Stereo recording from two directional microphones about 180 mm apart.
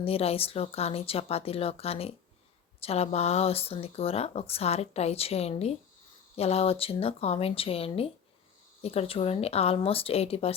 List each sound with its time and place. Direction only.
0.0 s speech: 35° left (ahead or behind)